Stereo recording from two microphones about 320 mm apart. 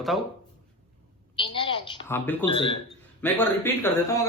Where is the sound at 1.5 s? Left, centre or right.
Centre.